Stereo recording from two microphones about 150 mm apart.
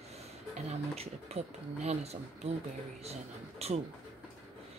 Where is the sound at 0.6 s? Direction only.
45° right (ahead or behind).